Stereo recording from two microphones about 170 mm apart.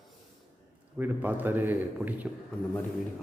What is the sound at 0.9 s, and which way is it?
A man's voice, 10° right (ahead or behind).